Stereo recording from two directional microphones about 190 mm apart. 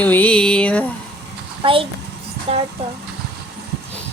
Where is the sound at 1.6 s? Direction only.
30° right (ahead or behind).